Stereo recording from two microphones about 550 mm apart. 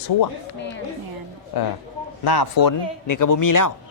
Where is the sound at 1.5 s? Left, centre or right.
Left.